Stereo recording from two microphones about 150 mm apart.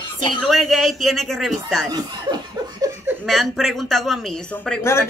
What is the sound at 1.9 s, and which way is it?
Laughter, 25° right (ahead or behind).